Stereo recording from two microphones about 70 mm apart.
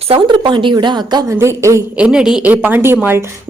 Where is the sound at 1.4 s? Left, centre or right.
Right.